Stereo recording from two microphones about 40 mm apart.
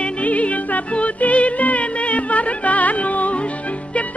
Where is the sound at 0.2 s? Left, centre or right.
Left.